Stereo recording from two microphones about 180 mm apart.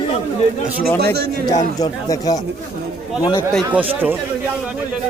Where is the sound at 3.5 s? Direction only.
5° right (ahead or behind).